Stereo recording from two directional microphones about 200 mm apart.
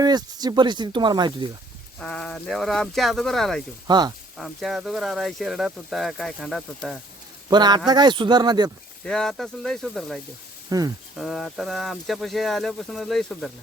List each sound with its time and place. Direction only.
0.0 s speech: 20° right (ahead or behind)
2.0 s speech: 5° left (ahead or behind)
3.8 s speech: 20° right (ahead or behind)
4.4 s speech: centre (ahead or behind)
7.5 s speech: 20° right (ahead or behind)
9.0 s speech: 5° left (ahead or behind)
10.7 s speech: 20° right (ahead or behind)
11.2 s speech: centre (ahead or behind)